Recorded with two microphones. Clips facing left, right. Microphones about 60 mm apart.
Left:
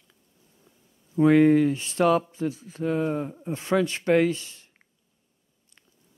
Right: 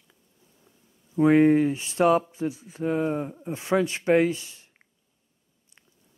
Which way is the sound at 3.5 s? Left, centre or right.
Right.